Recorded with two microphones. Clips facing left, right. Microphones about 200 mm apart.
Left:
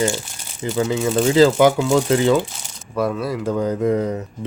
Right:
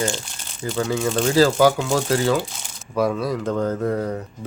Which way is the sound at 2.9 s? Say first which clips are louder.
Even; centre (ahead or behind).